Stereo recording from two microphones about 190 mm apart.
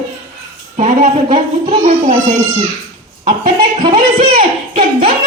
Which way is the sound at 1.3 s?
30° right (ahead or behind).